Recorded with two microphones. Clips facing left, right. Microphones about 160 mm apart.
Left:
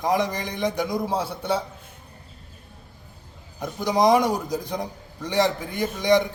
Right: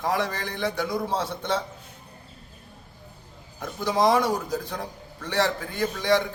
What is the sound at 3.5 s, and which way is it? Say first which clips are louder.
A man's voice: left 2 dB; 15° left (ahead or behind).